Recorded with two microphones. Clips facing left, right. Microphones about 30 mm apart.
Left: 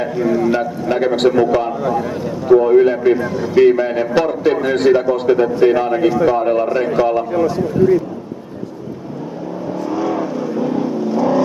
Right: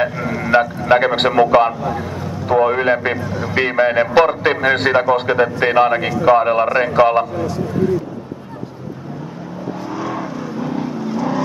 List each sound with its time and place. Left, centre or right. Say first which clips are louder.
0.2 s speech: left 7 dB; centre
0.5 s a man's voice: right 4 dB; right
9.8 s vehicle: left 6 dB; centre